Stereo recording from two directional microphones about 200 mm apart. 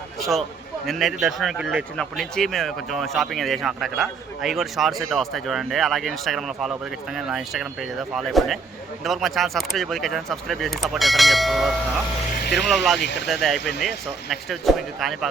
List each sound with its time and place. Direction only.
0.2 s a man's voice: centre (ahead or behind)
13.0 s speech: 60° left (ahead or behind)
13.2 s speech: centre (ahead or behind)